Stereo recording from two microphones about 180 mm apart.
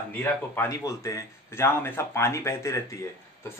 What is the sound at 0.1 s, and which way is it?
Speech, 10° left (ahead or behind).